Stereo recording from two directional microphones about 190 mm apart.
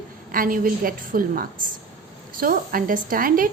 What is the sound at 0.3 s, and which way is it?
A woman's voice, 45° right (ahead or behind).